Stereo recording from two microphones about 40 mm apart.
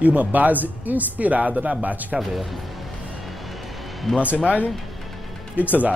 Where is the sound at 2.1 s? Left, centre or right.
Centre.